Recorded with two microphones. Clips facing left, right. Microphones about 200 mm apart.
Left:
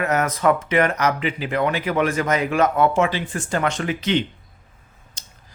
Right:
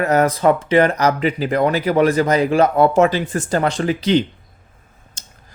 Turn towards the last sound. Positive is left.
turn(degrees=-35)  # may be behind; listen again after turning